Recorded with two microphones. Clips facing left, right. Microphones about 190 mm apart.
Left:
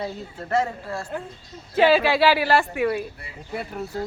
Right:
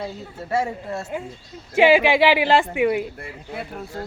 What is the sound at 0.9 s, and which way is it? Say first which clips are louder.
Speech: right 2 dB; 20° right (ahead or behind).